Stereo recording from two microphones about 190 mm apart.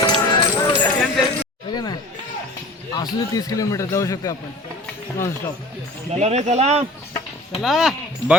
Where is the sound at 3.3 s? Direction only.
20° left (ahead or behind).